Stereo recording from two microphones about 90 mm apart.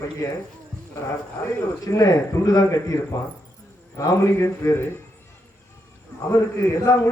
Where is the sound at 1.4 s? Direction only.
40° left (ahead or behind).